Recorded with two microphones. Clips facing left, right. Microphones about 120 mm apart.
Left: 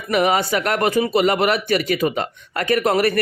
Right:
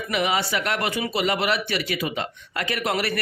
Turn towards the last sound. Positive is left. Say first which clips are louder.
# left 8 dB
turn(degrees=45)  # may be behind; listen again after turning